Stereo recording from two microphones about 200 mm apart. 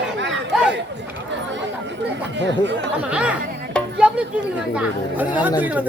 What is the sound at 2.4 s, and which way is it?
Speech, 60° right (ahead or behind).